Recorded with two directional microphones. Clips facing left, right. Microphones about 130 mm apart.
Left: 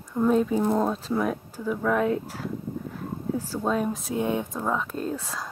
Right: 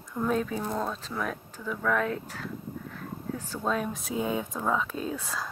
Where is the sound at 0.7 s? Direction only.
35° left (ahead or behind).